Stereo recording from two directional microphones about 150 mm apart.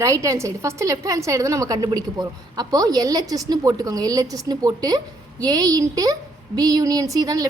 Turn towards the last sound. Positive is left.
turn(degrees=-25)  # may be behind; listen again after turning